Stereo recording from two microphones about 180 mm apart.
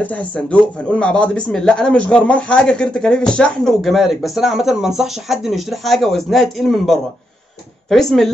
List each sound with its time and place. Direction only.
0.0 s speech: 5° left (ahead or behind)